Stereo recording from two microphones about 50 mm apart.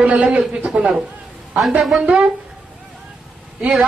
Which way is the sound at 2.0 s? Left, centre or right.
Right.